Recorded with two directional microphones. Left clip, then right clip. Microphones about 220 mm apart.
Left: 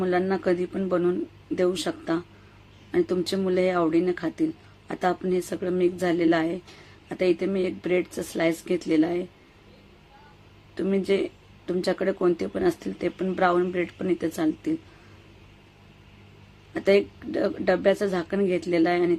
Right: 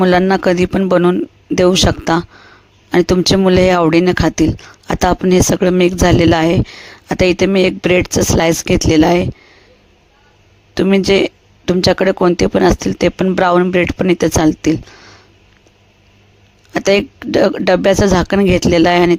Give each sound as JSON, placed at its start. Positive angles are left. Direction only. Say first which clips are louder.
{"t": 0.0, "sound": "speech", "louder": "right 13 dB", "side_deg": -45}
{"t": 10.8, "sound": "speech", "louder": "right 13 dB", "side_deg": -45}
{"t": 16.7, "sound": "speech", "louder": "right 8 dB", "side_deg": -45}